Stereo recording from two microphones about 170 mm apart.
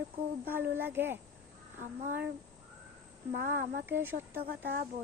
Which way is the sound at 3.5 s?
60° right (ahead or behind).